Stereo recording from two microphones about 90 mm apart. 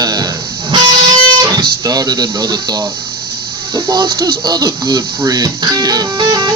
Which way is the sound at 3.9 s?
55° right (ahead or behind).